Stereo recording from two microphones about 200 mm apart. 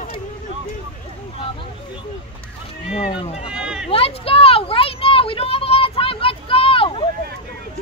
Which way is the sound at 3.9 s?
30° left (ahead or behind).